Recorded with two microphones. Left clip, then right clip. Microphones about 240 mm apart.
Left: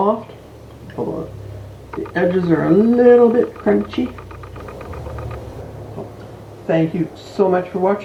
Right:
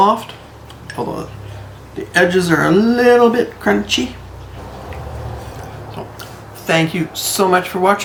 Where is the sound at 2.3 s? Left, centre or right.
Right.